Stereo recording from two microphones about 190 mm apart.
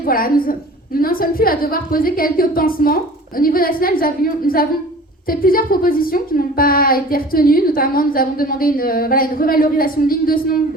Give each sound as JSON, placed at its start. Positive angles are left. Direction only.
{"t": 0.0, "sound": "a woman's voice", "side_deg": 50}